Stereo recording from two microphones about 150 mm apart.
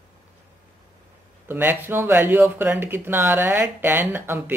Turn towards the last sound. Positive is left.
turn(degrees=-15)  # may be behind; listen again after turning